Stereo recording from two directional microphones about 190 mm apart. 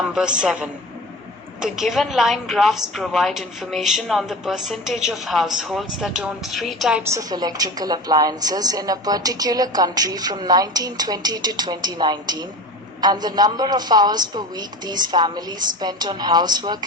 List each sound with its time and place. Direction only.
0.1 s a woman's voice: 5° right (ahead or behind)
7.1 s a woman's voice: 20° right (ahead or behind)